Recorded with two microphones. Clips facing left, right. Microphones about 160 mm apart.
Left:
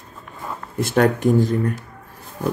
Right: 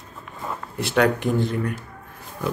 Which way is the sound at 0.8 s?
45° left (ahead or behind).